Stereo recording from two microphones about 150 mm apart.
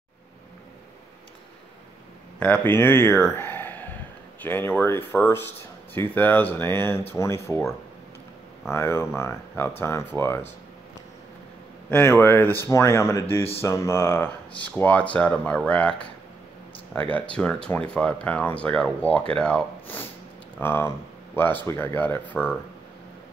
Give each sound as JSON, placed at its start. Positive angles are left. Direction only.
{"t": 2.4, "sound": "speech", "side_deg": 10}
{"t": 3.3, "sound": "a sound", "side_deg": 15}
{"t": 4.4, "sound": "speech", "side_deg": 15}
{"t": 8.6, "sound": "speech", "side_deg": 15}
{"t": 11.9, "sound": "speech", "side_deg": 15}